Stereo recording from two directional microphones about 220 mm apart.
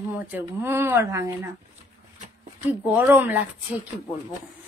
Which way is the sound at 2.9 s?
5° right (ahead or behind).